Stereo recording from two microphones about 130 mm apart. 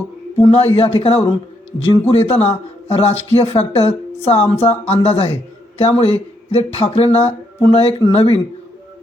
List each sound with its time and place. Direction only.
0.4 s speech: 45° left (ahead or behind)